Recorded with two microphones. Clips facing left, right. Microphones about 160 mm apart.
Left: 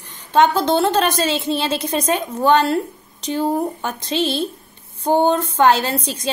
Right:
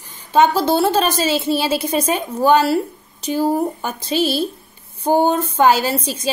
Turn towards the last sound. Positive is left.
turn(degrees=-5)  # may be behind; listen again after turning